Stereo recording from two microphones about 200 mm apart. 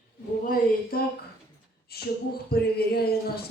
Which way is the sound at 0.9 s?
50° left (ahead or behind).